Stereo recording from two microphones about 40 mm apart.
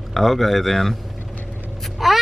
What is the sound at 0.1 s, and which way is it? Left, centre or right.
Speech, centre.